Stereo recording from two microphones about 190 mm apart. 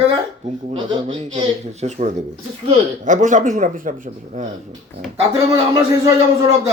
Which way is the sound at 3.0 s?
40° right (ahead or behind).